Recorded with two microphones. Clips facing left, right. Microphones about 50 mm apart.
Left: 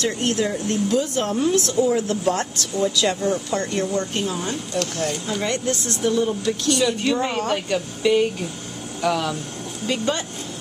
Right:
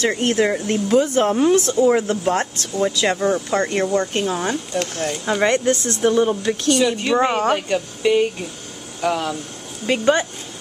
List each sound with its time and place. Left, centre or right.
0.2 s speech: right
0.7 s speech: right
1.5 s speech: right
5.2 s speech: right
7.1 s speech: right
7.7 s speech: centre
9.8 s speech: right